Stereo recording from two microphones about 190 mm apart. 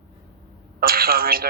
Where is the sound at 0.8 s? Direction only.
50° right (ahead or behind).